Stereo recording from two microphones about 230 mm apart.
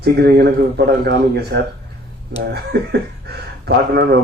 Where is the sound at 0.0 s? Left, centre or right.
Right.